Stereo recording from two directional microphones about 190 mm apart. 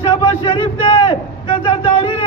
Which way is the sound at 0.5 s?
25° left (ahead or behind).